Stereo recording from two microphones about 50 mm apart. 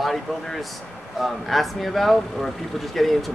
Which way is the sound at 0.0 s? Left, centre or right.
Centre.